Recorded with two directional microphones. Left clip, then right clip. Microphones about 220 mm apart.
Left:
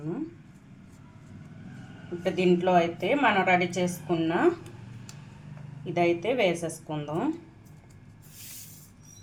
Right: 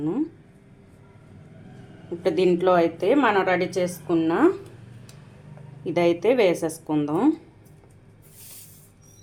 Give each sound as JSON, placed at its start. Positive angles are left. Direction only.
{"t": 2.2, "sound": "a woman's voice", "side_deg": -40}
{"t": 5.8, "sound": "a woman's voice", "side_deg": -40}